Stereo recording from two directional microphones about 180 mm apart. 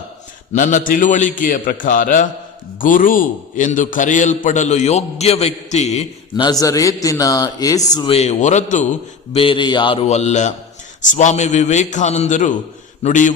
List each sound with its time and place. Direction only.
0.5 s a man's voice: 45° left (ahead or behind)
6.3 s a man's voice: 20° left (ahead or behind); by 8.9 s 40° left (ahead or behind)
9.3 s a man's voice: 30° left (ahead or behind)